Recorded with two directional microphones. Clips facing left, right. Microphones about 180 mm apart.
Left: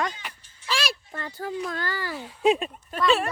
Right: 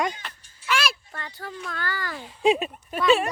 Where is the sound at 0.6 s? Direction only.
35° left (ahead or behind).